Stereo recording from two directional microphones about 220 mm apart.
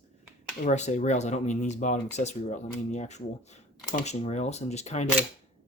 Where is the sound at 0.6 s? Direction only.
30° left (ahead or behind).